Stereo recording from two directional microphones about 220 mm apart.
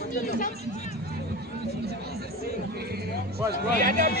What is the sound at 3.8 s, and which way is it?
Speech, 40° right (ahead or behind).